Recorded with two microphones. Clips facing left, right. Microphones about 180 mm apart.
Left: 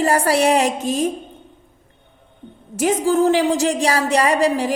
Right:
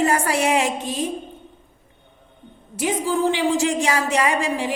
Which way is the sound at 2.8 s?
45° left (ahead or behind).